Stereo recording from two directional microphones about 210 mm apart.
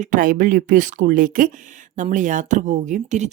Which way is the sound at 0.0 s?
40° right (ahead or behind).